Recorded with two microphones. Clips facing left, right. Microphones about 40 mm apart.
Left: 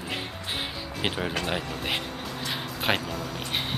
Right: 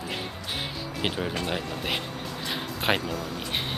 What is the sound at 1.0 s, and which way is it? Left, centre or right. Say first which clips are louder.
Speech: even; centre.